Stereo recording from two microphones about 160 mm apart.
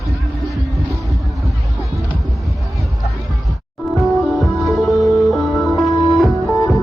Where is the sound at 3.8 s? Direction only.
Centre (ahead or behind).